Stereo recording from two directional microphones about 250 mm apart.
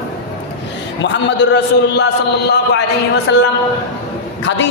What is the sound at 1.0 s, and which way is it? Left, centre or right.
A man's voice, left.